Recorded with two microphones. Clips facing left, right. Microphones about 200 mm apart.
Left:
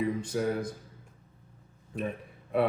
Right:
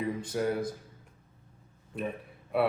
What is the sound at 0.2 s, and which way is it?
Speech, centre (ahead or behind).